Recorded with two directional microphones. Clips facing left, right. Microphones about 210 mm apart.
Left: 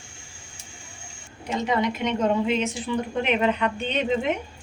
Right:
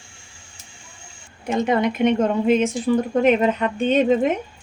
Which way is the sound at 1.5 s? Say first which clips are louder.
Right 5 dB; 50° right (ahead or behind).